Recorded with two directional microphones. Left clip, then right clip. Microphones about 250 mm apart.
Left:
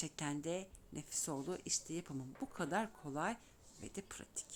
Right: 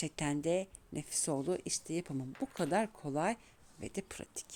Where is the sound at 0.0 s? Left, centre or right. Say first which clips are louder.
Right 7 dB; right.